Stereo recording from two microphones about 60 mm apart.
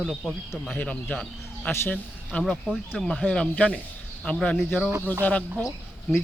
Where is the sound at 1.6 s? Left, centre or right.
Left.